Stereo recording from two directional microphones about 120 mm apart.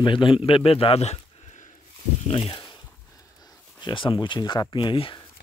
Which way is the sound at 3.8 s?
40° left (ahead or behind).